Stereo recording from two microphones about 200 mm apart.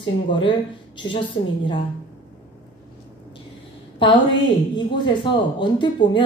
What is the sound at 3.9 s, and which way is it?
Speech, 25° left (ahead or behind).